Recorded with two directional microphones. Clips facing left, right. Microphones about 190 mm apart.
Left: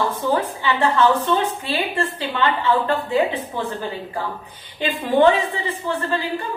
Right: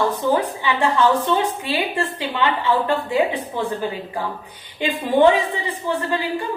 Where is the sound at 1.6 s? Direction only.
15° right (ahead or behind).